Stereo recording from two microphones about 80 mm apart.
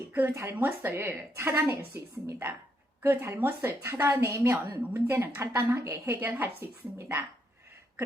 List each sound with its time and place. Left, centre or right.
0.3 s a woman's voice: right